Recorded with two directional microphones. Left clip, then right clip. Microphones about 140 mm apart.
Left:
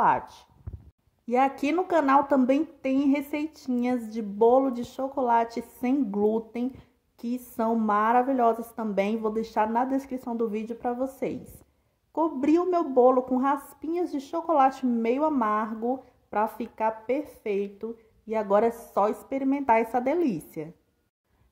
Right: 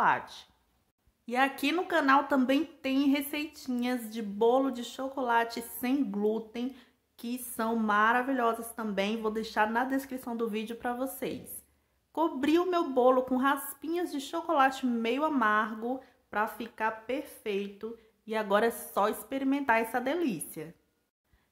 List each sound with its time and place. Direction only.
0.0 s a woman's voice: 35° left (ahead or behind)
18.7 s speech: centre (ahead or behind)
19.2 s a woman's voice: 25° left (ahead or behind)